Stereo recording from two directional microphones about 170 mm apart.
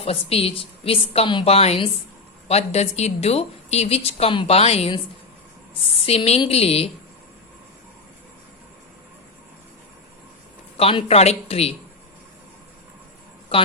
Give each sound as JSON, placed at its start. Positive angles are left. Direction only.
{"t": 0.0, "sound": "a woman's voice", "side_deg": 35}
{"t": 6.1, "sound": "a woman's voice", "side_deg": 35}
{"t": 10.8, "sound": "a woman's voice", "side_deg": 35}
{"t": 13.5, "sound": "a woman's voice", "side_deg": 35}